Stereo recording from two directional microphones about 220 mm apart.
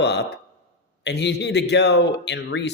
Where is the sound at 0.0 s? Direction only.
50° left (ahead or behind).